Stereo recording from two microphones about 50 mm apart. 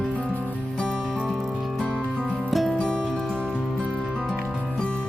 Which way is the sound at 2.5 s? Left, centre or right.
Centre.